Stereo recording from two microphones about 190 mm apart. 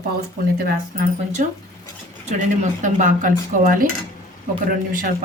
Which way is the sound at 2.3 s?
40° right (ahead or behind).